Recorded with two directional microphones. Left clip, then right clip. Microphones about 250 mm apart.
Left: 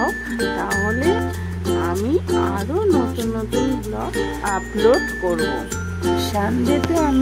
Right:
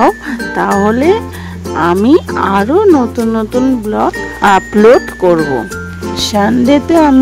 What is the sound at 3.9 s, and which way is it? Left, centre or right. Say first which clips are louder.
Speech: right 10 dB; right.